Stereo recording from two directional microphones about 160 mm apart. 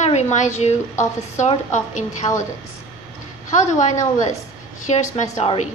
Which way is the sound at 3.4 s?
50° left (ahead or behind).